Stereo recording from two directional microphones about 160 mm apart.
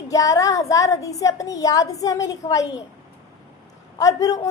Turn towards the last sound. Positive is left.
turn(degrees=20)  # may be behind; listen again after turning